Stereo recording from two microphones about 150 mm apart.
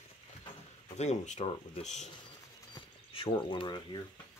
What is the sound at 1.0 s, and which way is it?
Speech, 50° left (ahead or behind).